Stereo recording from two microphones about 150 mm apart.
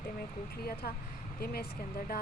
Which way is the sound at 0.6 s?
90° left.